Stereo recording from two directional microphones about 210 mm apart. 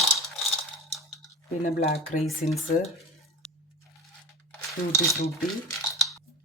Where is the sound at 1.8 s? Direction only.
30° left (ahead or behind).